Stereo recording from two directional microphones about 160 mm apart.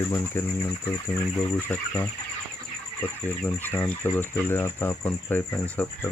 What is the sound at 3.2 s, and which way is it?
Speech, 10° left (ahead or behind).